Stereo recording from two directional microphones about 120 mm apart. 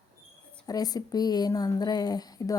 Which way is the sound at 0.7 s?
30° left (ahead or behind).